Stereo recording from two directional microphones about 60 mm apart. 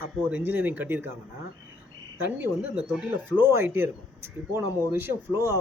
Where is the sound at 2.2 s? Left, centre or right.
Right.